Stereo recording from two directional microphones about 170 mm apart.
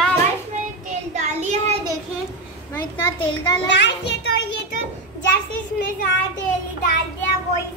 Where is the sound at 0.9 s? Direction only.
45° right (ahead or behind).